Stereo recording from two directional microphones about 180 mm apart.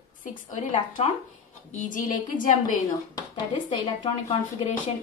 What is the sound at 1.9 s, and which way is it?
Speech, 45° left (ahead or behind).